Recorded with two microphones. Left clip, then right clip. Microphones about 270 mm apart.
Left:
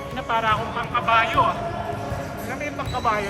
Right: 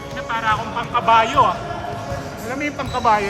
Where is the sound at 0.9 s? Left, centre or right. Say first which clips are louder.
Right 5 dB; centre.